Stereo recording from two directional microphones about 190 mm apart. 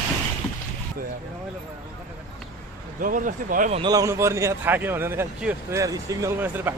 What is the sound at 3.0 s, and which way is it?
Speech, 45° right (ahead or behind).